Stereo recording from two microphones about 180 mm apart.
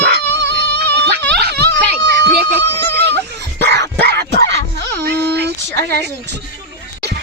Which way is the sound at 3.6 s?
70° right (ahead or behind).